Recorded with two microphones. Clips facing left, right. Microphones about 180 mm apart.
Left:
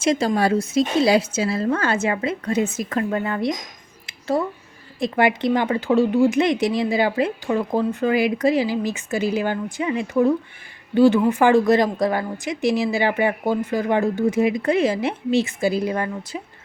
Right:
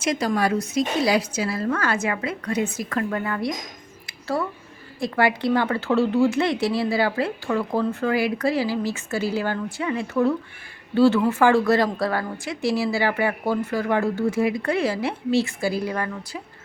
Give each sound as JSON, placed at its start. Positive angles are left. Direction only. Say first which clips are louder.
{"t": 0.0, "sound": "a woman's voice", "louder": "left 3 dB", "side_deg": 25}
{"t": 4.0, "sound": "a sound", "louder": "left 4 dB", "side_deg": 20}
{"t": 4.9, "sound": "a woman's voice", "louder": "left 2 dB", "side_deg": 20}